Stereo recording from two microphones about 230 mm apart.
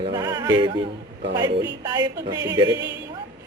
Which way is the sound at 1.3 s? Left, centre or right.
Centre.